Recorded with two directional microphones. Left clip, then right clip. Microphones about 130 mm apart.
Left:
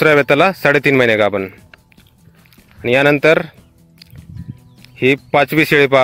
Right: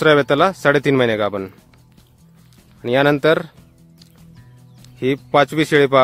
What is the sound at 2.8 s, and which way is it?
Speech, 20° left (ahead or behind).